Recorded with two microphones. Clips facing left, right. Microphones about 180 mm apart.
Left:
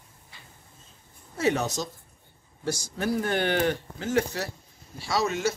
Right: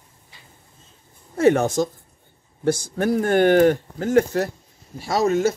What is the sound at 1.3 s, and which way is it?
Speech, 55° right (ahead or behind).